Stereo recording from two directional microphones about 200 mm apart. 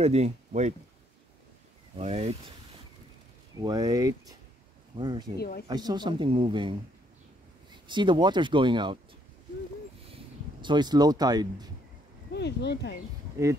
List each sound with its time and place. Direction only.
0.0 s speech: 30° right (ahead or behind)
2.0 s speech: 30° right (ahead or behind)
3.5 s speech: 20° right (ahead or behind)
5.4 s speech: 50° left (ahead or behind)
5.7 s speech: 20° right (ahead or behind)
7.7 s speech: 25° right (ahead or behind)
10.0 s speech: 25° right (ahead or behind)
12.3 s speech: 55° left (ahead or behind)